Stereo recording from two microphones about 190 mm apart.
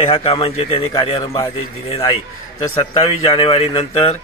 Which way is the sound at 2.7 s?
25° left (ahead or behind).